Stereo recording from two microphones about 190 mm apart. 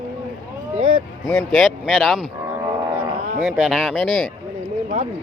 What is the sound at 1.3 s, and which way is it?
Speech, 10° left (ahead or behind).